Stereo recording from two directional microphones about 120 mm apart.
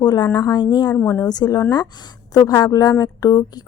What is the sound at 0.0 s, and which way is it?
Speech, 35° left (ahead or behind).